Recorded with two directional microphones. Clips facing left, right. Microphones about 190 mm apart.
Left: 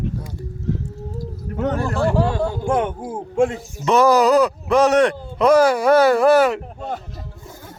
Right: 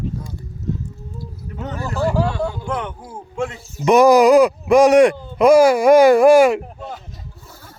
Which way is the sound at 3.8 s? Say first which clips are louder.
Right 4 dB; 15° right (ahead or behind).